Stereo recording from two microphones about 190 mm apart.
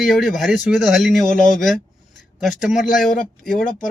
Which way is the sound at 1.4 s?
45° left (ahead or behind).